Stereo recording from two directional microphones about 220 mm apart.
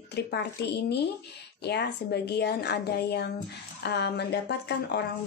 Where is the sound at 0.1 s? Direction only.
50° left (ahead or behind).